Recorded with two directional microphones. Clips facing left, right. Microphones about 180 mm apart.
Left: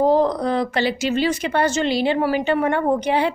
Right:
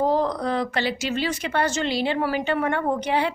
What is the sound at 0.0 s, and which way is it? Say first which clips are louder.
Speech: left 5 dB; 20° left (ahead or behind).